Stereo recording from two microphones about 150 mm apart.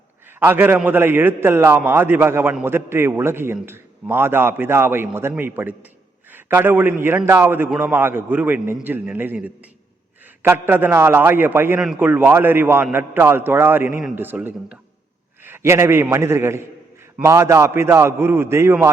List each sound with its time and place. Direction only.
0.3 s a man's voice: 15° right (ahead or behind)